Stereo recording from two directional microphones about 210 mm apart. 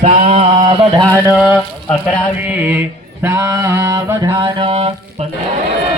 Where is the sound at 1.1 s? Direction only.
10° right (ahead or behind).